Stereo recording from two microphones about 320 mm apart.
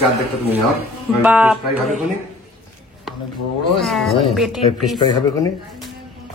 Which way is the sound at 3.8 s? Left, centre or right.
Centre.